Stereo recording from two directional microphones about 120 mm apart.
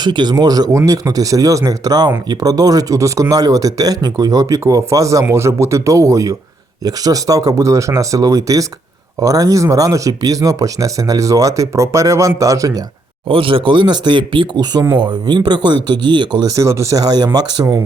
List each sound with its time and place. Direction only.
0.0 s speech: 35° right (ahead or behind)
13.2 s speech: 45° right (ahead or behind)
16.6 s speech: 25° right (ahead or behind)